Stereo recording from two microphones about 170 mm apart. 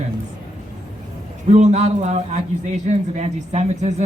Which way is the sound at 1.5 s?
40° right (ahead or behind).